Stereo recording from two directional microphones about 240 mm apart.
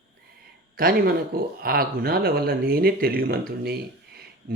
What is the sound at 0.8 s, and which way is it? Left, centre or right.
Speech, right.